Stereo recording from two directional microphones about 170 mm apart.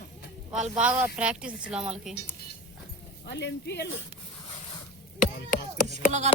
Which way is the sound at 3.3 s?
90° left.